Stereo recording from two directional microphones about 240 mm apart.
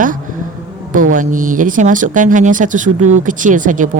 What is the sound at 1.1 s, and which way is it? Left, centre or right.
Speech, right.